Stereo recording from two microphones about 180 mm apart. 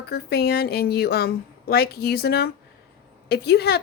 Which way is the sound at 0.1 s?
60° left (ahead or behind).